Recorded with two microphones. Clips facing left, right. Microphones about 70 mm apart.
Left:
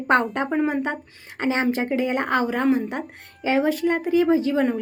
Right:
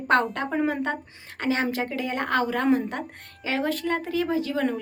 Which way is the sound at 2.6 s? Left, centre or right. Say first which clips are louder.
Left 1 dB; centre.